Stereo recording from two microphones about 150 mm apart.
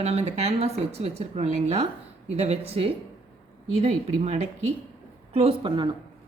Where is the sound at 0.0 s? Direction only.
45° right (ahead or behind).